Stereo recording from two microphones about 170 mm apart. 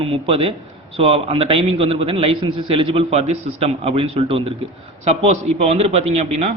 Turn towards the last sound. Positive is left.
turn(degrees=-40)  # may be behind; listen again after turning